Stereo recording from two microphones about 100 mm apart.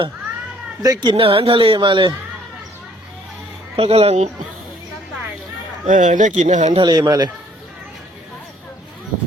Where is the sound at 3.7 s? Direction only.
85° right.